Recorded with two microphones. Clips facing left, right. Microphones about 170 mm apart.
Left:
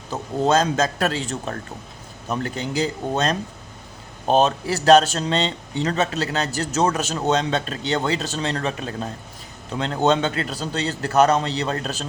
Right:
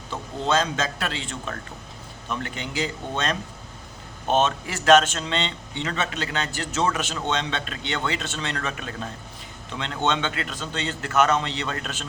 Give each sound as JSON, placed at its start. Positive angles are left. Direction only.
{"t": 0.1, "sound": "a man's voice", "side_deg": 40}